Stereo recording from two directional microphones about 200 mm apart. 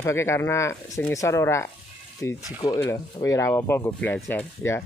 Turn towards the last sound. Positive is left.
turn(degrees=15)  # may be behind; listen again after turning